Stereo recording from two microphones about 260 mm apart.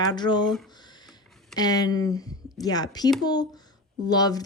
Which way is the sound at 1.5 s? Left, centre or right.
Centre.